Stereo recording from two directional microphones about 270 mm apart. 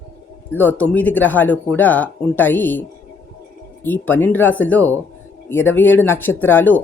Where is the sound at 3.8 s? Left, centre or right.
Centre.